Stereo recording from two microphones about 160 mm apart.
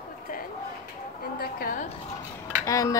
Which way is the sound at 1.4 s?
65° left (ahead or behind).